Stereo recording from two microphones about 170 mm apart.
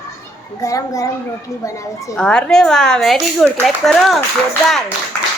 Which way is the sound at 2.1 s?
5° left (ahead or behind).